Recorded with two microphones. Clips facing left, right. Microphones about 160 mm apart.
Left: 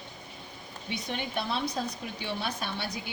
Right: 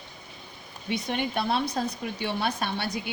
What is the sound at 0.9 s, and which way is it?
Speech, 65° right (ahead or behind).